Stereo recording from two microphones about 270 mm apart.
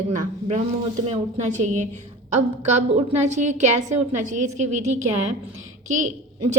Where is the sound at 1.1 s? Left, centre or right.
Right.